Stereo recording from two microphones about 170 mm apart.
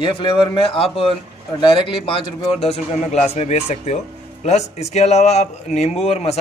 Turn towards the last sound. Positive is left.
turn(degrees=40)  # may be behind; listen again after turning